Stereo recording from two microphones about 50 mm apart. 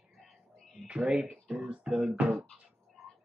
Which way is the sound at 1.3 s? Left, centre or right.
Centre.